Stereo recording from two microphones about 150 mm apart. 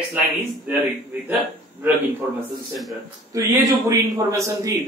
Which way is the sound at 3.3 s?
20° right (ahead or behind).